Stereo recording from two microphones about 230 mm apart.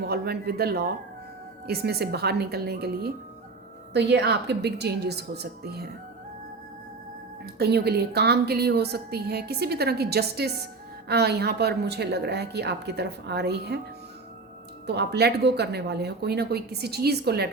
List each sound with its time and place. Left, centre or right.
0.0 s a woman's voice: right
7.4 s a woman's voice: right
14.8 s a woman's voice: right